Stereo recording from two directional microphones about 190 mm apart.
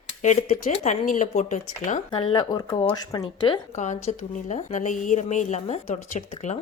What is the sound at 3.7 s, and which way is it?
Speech, 40° left (ahead or behind).